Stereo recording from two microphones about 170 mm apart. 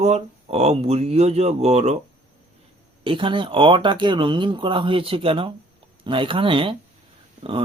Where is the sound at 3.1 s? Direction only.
30° right (ahead or behind).